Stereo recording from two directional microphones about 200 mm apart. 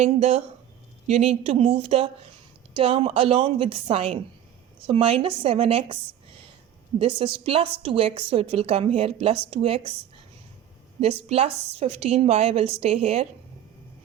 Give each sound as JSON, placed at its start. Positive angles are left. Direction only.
{"t": 0.0, "sound": "a woman's voice", "side_deg": -30}
{"t": 7.0, "sound": "a woman's voice", "side_deg": -25}
{"t": 11.0, "sound": "a woman's voice", "side_deg": -30}